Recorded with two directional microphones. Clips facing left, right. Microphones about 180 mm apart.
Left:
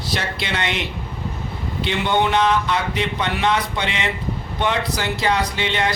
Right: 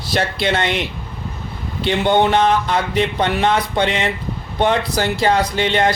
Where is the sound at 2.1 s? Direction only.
45° right (ahead or behind).